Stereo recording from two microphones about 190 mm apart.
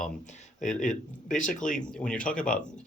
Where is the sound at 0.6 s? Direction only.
40° left (ahead or behind).